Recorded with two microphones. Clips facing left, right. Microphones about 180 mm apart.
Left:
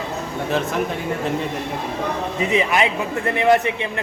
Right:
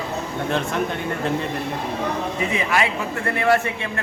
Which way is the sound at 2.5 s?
20° left (ahead or behind).